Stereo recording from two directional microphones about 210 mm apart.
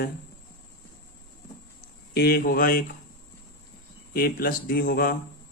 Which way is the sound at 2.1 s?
45° left (ahead or behind).